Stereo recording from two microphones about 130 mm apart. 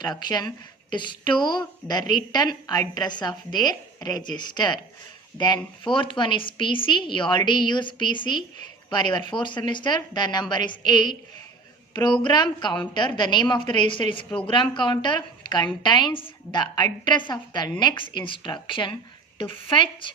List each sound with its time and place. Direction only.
0.0 s a woman's voice: 35° left (ahead or behind)
5.8 s a woman's voice: 40° left (ahead or behind)
12.2 s a woman's voice: 35° left (ahead or behind)